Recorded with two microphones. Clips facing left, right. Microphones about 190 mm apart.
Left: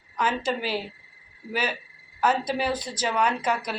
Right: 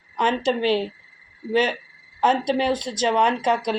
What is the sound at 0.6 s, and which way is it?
Speech, 25° right (ahead or behind).